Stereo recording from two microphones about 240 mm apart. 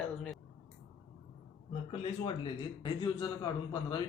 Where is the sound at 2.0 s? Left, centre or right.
Centre.